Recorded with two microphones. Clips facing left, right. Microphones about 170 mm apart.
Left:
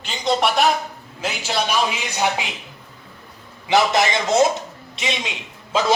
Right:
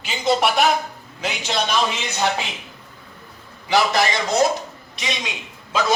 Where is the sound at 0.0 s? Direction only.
5° right (ahead or behind).